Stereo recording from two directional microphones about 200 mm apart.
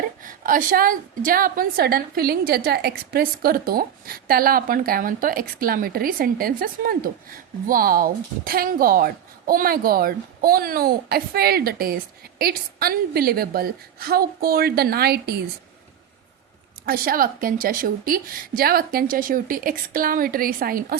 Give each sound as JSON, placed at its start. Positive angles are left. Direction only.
{"t": 0.2, "sound": "a woman's voice", "side_deg": -45}
{"t": 16.8, "sound": "a woman's voice", "side_deg": -45}